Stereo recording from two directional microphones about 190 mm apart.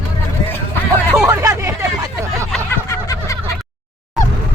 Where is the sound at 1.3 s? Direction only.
15° right (ahead or behind).